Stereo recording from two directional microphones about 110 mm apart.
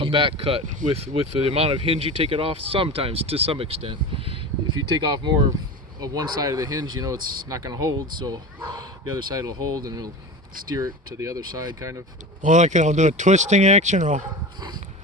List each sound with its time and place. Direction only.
0.0 s speech: 50° right (ahead or behind)
4.9 s speech: 45° right (ahead or behind)
12.5 s speech: 90° right